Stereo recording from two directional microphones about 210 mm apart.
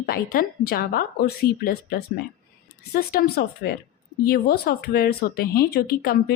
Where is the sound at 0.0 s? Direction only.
45° left (ahead or behind).